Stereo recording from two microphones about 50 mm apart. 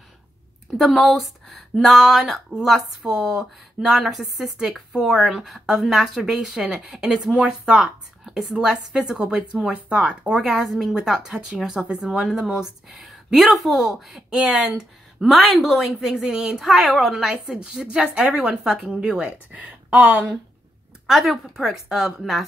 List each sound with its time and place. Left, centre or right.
0.7 s a woman's voice: centre
8.6 s a woman's voice: centre
10.5 s a woman's voice: centre
14.3 s a woman's voice: centre
21.1 s a woman's voice: centre